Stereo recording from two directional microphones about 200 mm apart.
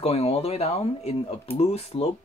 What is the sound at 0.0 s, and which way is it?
Speech, 30° left (ahead or behind).